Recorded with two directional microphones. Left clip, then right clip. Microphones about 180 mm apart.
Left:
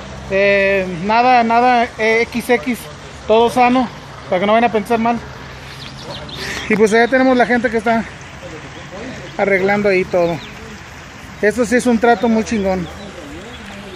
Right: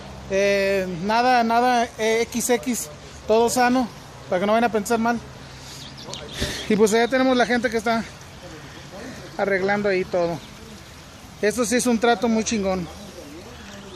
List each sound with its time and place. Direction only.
0.3 s speech: 20° right (ahead or behind)
7.0 s speech: centre (ahead or behind)
9.4 s speech: 5° left (ahead or behind)
11.4 s speech: 5° left (ahead or behind)